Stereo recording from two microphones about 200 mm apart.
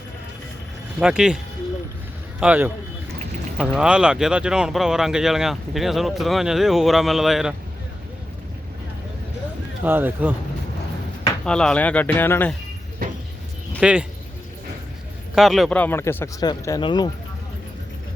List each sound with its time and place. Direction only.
0.9 s speech: 5° right (ahead or behind)
2.4 s speech: 10° right (ahead or behind)
3.8 s speech: 5° right (ahead or behind)
9.8 s speech: 10° right (ahead or behind)
11.4 s speech: 5° left (ahead or behind)
13.8 s speech: 5° right (ahead or behind)
15.4 s speech: centre (ahead or behind); by 17.1 s 20° left (ahead or behind)